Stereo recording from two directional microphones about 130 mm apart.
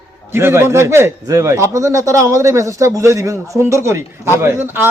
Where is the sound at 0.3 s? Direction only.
20° right (ahead or behind).